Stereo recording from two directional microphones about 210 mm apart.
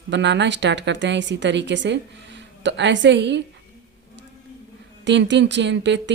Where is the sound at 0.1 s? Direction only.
55° right (ahead or behind).